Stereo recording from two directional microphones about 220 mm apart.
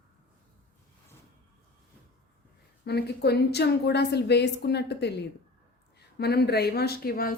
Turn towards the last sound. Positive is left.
turn(degrees=45)  # may be behind; listen again after turning